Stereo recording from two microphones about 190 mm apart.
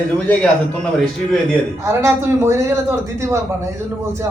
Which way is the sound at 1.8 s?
15° right (ahead or behind).